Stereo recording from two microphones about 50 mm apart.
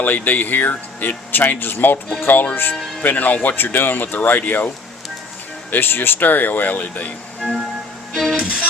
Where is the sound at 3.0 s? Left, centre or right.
Left.